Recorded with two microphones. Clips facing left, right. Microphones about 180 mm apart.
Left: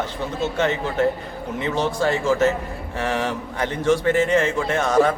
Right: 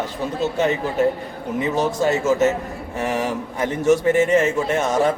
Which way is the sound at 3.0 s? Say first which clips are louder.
Right 1 dB; 10° right (ahead or behind).